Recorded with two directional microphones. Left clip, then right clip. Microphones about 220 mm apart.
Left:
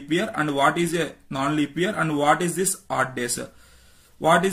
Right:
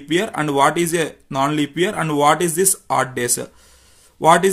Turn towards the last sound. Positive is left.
turn(degrees=-40)  # may be behind; listen again after turning